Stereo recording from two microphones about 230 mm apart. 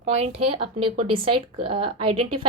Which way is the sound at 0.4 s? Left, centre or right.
Right.